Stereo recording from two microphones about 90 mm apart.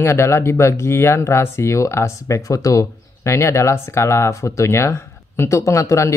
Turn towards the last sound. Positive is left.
turn(degrees=35)  # may be behind; listen again after turning